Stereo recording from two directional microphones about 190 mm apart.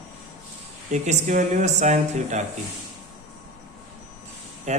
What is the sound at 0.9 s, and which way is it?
Speech, 40° right (ahead or behind).